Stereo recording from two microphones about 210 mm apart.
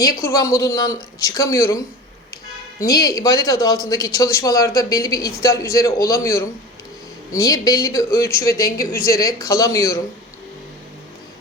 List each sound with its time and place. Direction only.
0.0 s a man's voice: 15° left (ahead or behind)
2.8 s a man's voice: 15° left (ahead or behind)